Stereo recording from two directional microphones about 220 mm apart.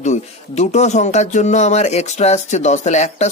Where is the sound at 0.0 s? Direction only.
30° left (ahead or behind).